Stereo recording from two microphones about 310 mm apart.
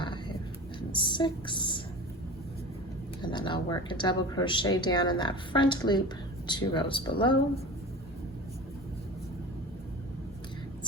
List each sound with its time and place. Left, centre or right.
0.9 s a woman's voice: centre
3.2 s speech: centre